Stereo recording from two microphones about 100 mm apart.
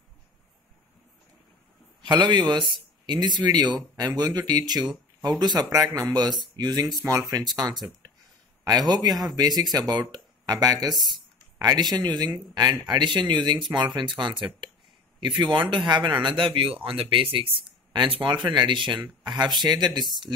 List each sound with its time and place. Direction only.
2.0 s speech: 45° right (ahead or behind)